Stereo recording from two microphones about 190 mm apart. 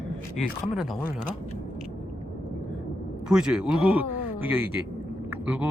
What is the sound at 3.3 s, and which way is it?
Speech, 5° right (ahead or behind).